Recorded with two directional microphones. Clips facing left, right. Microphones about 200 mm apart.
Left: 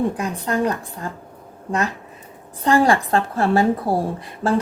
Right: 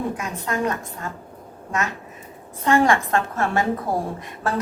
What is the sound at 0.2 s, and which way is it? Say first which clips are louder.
Speech: left 4 dB; 35° left (ahead or behind).